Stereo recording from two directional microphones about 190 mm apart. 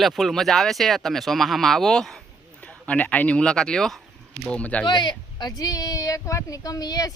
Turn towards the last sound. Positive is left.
turn(degrees=20)  # may be behind; listen again after turning